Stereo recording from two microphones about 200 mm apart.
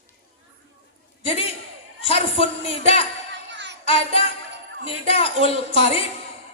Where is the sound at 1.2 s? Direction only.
30° left (ahead or behind).